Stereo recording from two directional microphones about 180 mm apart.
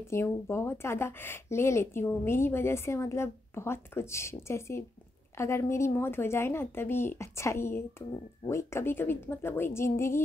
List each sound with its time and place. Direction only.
0.1 s speech: 15° left (ahead or behind)